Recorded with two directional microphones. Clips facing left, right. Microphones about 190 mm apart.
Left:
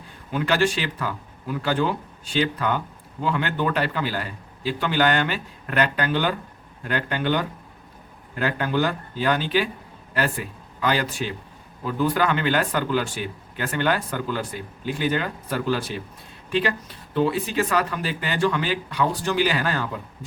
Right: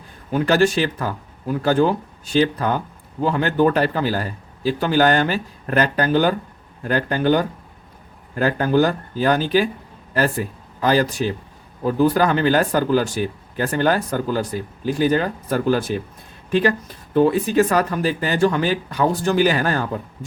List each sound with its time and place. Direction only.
0.3 s speech: 45° right (ahead or behind)